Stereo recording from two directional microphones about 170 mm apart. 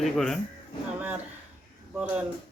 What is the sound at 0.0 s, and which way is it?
Speech, 5° left (ahead or behind).